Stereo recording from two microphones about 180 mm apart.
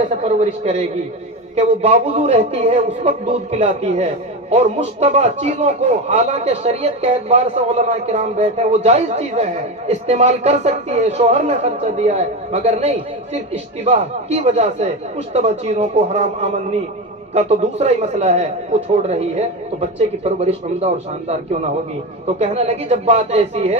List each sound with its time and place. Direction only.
0.2 s speech: 35° right (ahead or behind)